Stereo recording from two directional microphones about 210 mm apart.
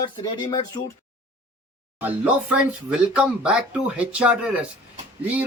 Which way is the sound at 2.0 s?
5° right (ahead or behind).